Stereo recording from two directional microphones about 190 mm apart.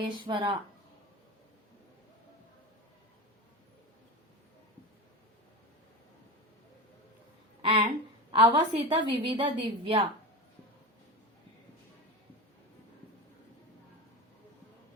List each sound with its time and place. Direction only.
0.3 s a woman's voice: 25° right (ahead or behind)
7.6 s a woman's voice: 25° right (ahead or behind)